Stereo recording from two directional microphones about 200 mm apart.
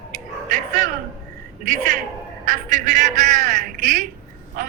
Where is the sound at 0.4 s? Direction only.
40° right (ahead or behind).